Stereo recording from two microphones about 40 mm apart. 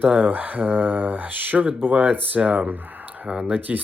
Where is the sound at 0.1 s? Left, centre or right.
Right.